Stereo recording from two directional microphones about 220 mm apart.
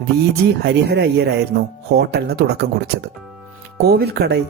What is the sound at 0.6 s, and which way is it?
Speech, 50° right (ahead or behind).